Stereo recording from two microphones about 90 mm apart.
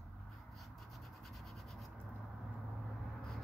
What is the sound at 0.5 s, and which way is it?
Rub, centre (ahead or behind).